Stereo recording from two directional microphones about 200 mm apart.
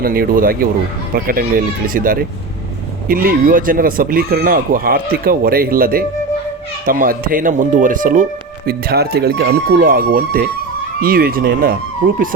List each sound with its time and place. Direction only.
0.0 s speech: 45° right (ahead or behind)